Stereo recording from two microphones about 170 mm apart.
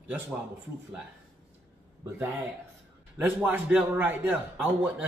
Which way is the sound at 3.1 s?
10° right (ahead or behind).